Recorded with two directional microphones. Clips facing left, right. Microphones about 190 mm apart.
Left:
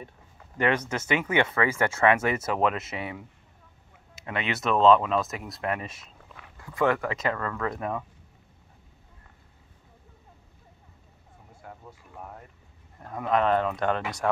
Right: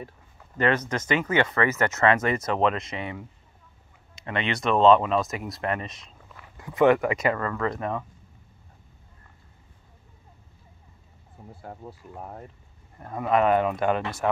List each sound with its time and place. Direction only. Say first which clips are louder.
0.6 s speech: right 2 dB; 10° left (ahead or behind)
6.5 s speech: right 6 dB; 20° right (ahead or behind); by 8.0 s 5° left (ahead or behind)
11.6 s speech: right 5 dB; 35° right (ahead or behind)
13.0 s speech: right 3 dB; 5° right (ahead or behind)